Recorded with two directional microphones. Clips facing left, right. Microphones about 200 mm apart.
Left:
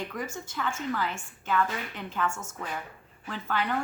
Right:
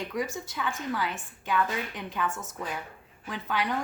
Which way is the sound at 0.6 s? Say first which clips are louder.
Left 1 dB; 15° right (ahead or behind).